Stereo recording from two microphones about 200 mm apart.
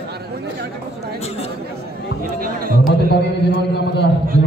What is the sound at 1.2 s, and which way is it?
Chatter, 30° left (ahead or behind).